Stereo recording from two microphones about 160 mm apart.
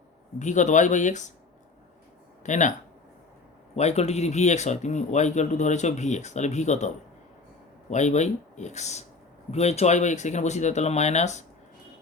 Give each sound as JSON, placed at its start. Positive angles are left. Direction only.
{"t": 0.3, "sound": "speech", "side_deg": 50}
{"t": 2.4, "sound": "speech", "side_deg": 50}
{"t": 3.8, "sound": "speech", "side_deg": 40}